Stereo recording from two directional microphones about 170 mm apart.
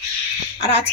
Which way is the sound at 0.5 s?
35° left (ahead or behind).